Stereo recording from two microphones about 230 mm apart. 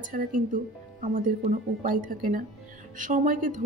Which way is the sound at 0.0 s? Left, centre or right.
Right.